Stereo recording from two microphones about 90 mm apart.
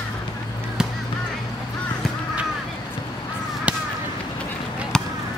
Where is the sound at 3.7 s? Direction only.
15° right (ahead or behind).